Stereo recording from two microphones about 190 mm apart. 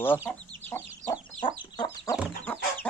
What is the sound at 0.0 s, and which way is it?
Chicken, 10° left (ahead or behind).